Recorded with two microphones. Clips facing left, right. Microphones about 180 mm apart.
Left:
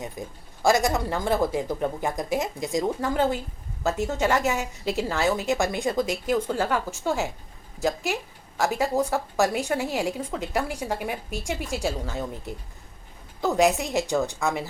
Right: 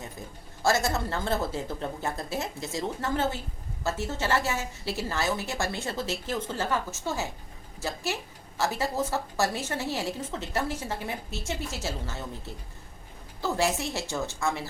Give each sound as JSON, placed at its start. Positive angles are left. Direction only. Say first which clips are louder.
{"t": 0.2, "sound": "a woman's voice", "louder": "left 1 dB", "side_deg": 15}